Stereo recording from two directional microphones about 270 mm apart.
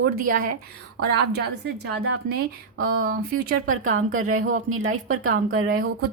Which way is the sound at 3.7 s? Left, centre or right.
Right.